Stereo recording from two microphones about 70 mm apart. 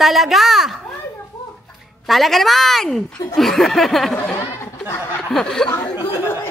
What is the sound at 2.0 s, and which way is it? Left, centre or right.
A woman's voice, centre.